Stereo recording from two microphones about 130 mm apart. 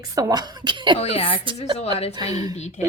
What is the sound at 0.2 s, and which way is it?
Speech, 30° right (ahead or behind).